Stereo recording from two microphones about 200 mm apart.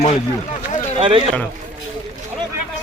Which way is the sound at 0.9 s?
25° right (ahead or behind).